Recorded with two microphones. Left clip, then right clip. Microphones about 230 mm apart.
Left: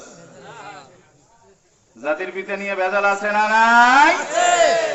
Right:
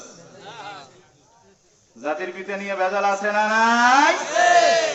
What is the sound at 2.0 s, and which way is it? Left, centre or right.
A man's voice, left.